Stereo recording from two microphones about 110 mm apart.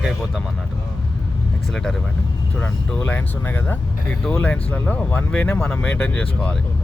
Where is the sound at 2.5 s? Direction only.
15° left (ahead or behind).